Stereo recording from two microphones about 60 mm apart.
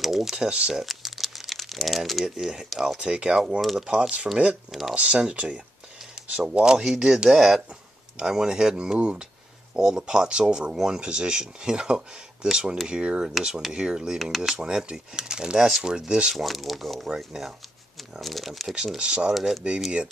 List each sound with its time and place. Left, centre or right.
0.0 s speech: centre
0.8 s crumpling: centre
2.3 s speech: centre
2.7 s speech: centre
3.0 s speech: centre
14.1 s speech: centre
14.5 s speech: centre
16.3 s speech: centre
18.2 s speech: centre
18.8 s speech: centre
19.3 s speech: centre